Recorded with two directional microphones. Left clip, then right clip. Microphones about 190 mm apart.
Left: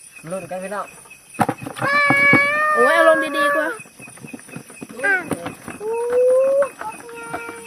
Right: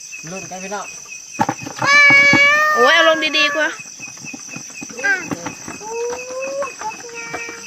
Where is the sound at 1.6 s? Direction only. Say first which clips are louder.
Right 8 dB; 25° left (ahead or behind).